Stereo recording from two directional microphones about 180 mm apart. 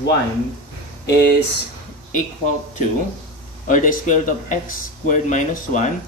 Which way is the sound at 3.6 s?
45° left (ahead or behind).